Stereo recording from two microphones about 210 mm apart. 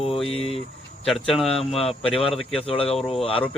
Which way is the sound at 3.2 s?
25° left (ahead or behind).